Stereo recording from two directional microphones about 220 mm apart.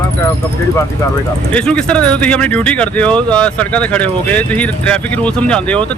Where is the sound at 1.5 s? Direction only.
5° left (ahead or behind).